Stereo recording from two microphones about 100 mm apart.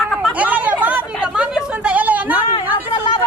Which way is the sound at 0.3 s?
15° right (ahead or behind).